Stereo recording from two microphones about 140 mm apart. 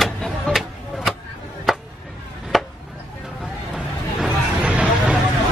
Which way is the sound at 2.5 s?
Centre (ahead or behind).